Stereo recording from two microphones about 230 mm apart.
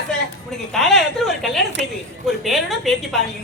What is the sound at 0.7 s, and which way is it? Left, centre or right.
A woman's voice, centre.